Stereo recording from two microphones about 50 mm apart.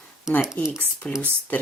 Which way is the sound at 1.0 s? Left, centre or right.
Left.